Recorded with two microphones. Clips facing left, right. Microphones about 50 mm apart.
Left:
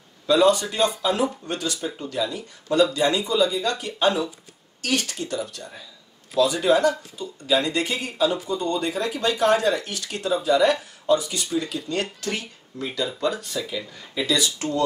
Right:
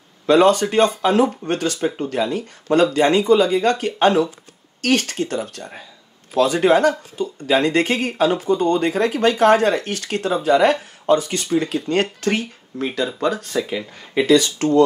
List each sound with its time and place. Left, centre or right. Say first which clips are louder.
0.3 s speech: right 4 dB; right